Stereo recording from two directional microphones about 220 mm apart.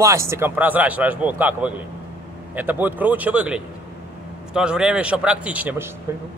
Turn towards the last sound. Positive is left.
turn(degrees=-5)  # may be behind; listen again after turning